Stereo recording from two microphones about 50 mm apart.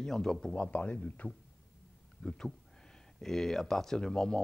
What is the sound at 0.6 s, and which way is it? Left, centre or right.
Speech, left.